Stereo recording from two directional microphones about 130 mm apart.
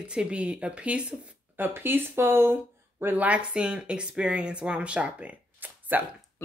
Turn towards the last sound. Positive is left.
turn(degrees=-15)  # may be behind; listen again after turning